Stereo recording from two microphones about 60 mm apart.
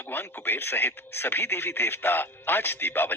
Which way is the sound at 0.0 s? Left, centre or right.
Left.